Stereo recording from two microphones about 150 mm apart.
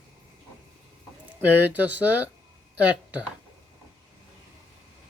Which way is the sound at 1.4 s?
10° right (ahead or behind).